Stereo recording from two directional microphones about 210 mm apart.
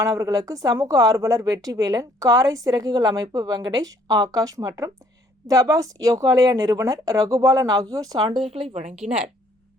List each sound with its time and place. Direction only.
0.0 s a woman's voice: 15° right (ahead or behind)